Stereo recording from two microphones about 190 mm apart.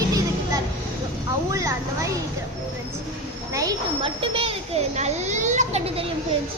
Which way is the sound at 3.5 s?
20° right (ahead or behind).